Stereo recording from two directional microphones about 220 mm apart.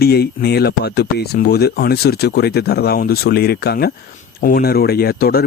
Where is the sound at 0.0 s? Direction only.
45° left (ahead or behind).